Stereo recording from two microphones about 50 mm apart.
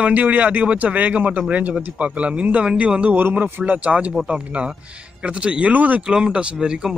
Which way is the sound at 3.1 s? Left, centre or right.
Right.